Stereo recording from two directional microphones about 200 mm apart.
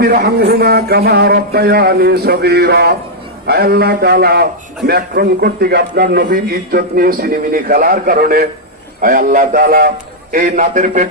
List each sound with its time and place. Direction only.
0.0 s a man's voice: 50° right (ahead or behind)
10.3 s speech: 40° right (ahead or behind)